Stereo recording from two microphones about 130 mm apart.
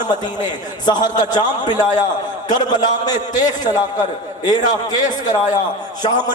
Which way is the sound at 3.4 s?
75° left (ahead or behind).